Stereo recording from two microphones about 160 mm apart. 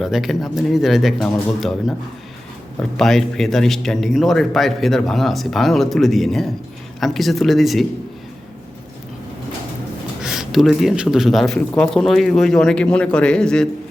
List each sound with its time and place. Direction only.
0.0 s speech: centre (ahead or behind)
3.0 s speech: centre (ahead or behind)
10.2 s speech: centre (ahead or behind)